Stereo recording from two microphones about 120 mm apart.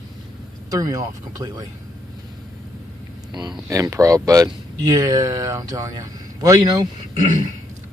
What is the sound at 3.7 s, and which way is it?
Speech, 25° right (ahead or behind).